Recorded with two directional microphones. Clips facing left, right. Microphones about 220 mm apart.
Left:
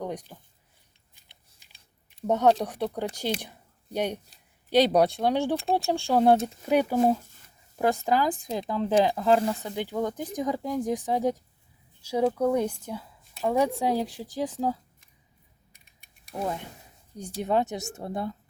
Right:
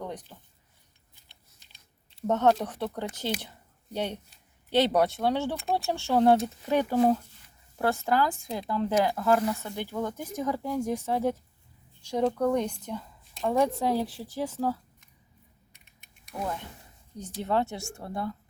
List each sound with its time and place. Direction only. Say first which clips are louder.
0.0 s a sound: left 4 dB; 10° left (ahead or behind)
2.2 s speech: left 2 dB; 10° left (ahead or behind)
16.4 s speech: left 3 dB; 15° left (ahead or behind)